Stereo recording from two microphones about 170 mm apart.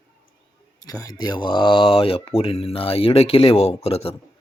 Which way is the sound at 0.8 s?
20° left (ahead or behind).